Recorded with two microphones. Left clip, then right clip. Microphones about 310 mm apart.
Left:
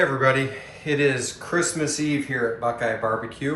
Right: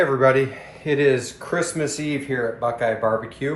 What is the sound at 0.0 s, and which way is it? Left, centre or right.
Speech, centre.